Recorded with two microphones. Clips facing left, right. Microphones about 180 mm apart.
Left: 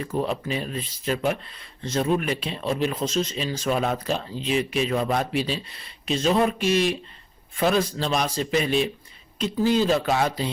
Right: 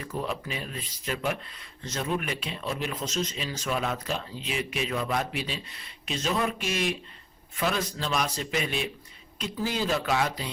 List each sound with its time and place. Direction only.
0.2 s speech: 30° left (ahead or behind)